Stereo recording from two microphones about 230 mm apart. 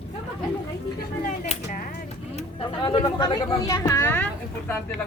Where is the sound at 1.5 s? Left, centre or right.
Left.